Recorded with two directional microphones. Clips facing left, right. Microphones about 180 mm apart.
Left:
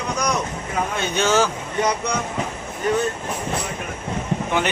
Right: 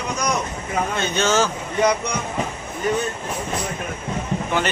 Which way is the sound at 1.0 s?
15° left (ahead or behind).